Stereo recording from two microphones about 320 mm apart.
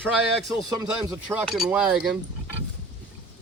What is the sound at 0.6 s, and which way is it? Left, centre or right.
Speech, right.